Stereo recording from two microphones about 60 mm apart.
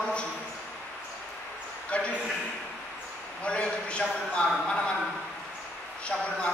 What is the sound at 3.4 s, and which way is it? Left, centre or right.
A man's voice, centre.